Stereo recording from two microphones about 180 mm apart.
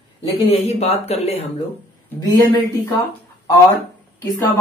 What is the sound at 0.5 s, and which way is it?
Speech, 35° left (ahead or behind).